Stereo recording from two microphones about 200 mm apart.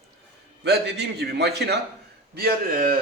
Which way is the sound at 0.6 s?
55° right (ahead or behind).